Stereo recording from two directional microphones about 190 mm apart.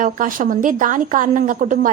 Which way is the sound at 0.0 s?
45° right (ahead or behind).